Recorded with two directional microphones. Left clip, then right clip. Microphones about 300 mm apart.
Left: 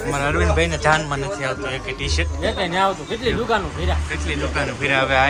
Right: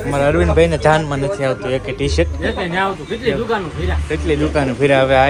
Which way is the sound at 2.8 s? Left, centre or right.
Centre.